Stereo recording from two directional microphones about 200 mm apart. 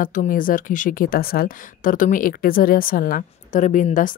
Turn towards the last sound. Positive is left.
turn(degrees=40)  # may be behind; listen again after turning